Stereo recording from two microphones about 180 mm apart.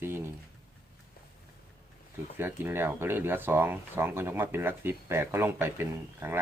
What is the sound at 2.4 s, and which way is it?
Speech, 10° right (ahead or behind).